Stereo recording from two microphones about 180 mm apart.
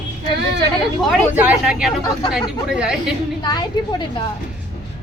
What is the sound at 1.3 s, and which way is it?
A woman's voice, 10° right (ahead or behind).